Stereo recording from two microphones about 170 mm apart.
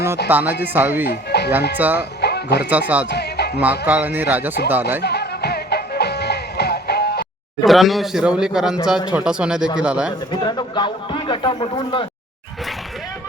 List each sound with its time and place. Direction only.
0.3 s speech: 10° right (ahead or behind)
1.0 s speech: 75° left (ahead or behind)
1.8 s speech: 10° right (ahead or behind)
2.2 s music: 75° left (ahead or behind)
2.6 s speech: 10° right (ahead or behind)
3.1 s music: 75° left (ahead or behind)
3.6 s speech: 10° right (ahead or behind)
5.0 s music: 75° left (ahead or behind)
7.6 s a man's voice: centre (ahead or behind)
10.4 s a man's voice: 25° left (ahead or behind)